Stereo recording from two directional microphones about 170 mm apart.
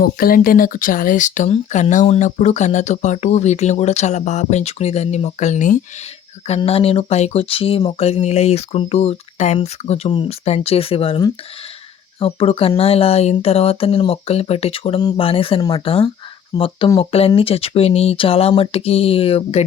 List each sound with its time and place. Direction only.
0.0 s speech: 60° left (ahead or behind)
6.6 s speech: 35° left (ahead or behind)